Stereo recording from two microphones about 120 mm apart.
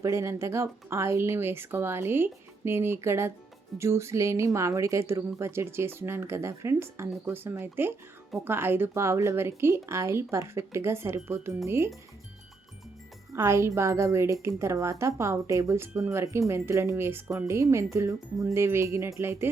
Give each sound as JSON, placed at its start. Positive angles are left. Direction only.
{"t": 0.0, "sound": "speech", "side_deg": -25}
{"t": 13.3, "sound": "speech", "side_deg": -20}